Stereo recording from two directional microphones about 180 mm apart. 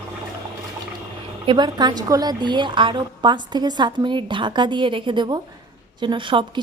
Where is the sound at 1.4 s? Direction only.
25° right (ahead or behind).